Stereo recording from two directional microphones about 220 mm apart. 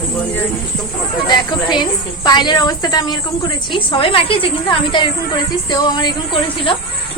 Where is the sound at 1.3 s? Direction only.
20° left (ahead or behind).